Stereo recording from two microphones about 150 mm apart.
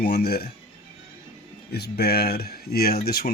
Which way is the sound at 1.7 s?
90° left.